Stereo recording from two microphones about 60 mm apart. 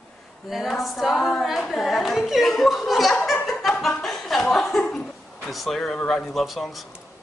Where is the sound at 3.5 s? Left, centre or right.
Centre.